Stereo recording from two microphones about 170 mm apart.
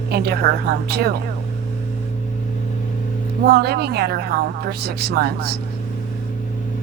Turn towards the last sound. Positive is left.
turn(degrees=-70)  # may be behind; listen again after turning